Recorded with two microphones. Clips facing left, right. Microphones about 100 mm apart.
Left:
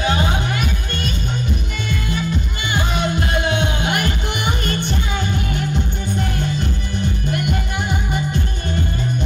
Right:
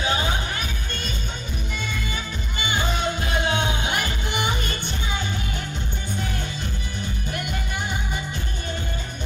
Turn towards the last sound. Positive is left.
turn(degrees=60)  # may be behind; listen again after turning